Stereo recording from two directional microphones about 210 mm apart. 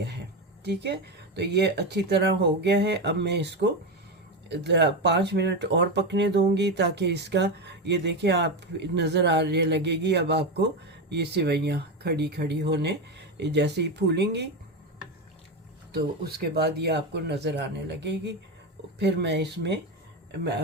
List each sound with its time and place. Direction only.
0.6 s speech: 55° right (ahead or behind)
15.9 s speech: 50° right (ahead or behind)